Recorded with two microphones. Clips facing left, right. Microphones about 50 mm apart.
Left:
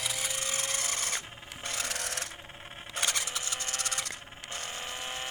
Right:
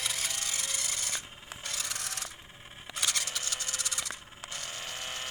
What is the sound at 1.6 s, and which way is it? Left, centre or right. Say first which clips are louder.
Wood: left 3 dB; left.